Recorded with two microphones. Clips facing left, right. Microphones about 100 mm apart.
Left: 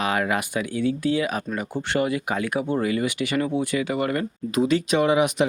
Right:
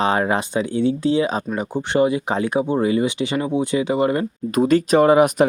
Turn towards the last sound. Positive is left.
turn(degrees=-45)  # may be behind; listen again after turning